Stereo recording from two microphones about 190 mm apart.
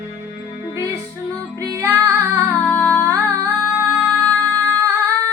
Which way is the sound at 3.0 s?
15° right (ahead or behind).